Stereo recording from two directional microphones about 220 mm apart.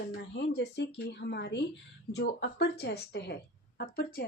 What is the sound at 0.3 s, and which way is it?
Speech, 50° left (ahead or behind).